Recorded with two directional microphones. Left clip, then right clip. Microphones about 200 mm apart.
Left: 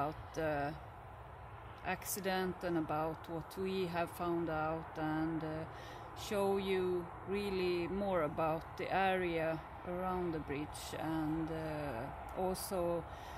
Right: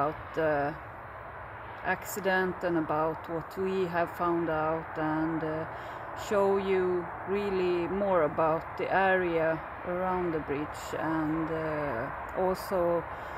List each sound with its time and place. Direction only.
0.0 s speech: 10° right (ahead or behind)
1.9 s speech: 10° right (ahead or behind)
11.7 s speech: 35° right (ahead or behind)
12.0 s speech: 10° right (ahead or behind)